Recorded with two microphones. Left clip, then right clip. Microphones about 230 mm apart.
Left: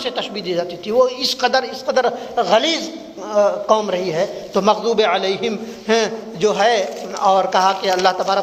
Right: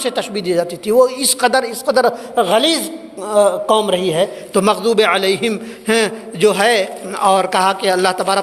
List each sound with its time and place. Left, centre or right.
0.0 s a man's voice: right